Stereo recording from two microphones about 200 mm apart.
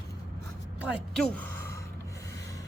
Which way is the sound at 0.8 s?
Centre (ahead or behind).